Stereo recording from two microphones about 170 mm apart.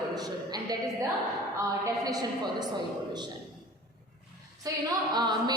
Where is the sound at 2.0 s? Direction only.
20° right (ahead or behind).